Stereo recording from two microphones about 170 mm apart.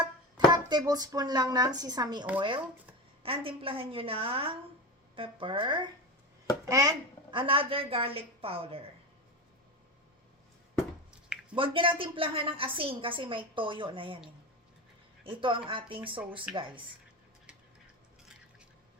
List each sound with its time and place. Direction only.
0.0 s speech: 25° right (ahead or behind)
3.2 s a woman's voice: 35° right (ahead or behind)
11.5 s a woman's voice: 30° right (ahead or behind)
15.2 s a woman's voice: 30° right (ahead or behind)